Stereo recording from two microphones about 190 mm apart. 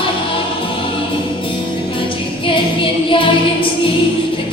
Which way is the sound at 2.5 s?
25° left (ahead or behind).